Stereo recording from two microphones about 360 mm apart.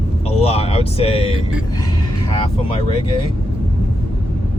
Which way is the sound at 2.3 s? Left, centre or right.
Centre.